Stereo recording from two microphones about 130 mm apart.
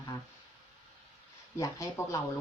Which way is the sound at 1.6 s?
25° left (ahead or behind).